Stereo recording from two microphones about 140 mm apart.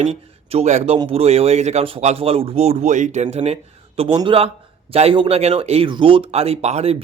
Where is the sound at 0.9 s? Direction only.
40° right (ahead or behind).